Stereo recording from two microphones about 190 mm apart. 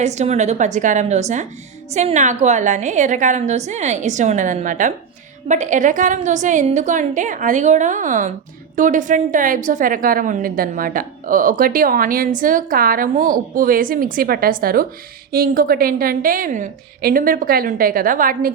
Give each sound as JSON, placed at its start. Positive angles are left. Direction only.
{"t": 0.0, "sound": "a woman's voice", "side_deg": -35}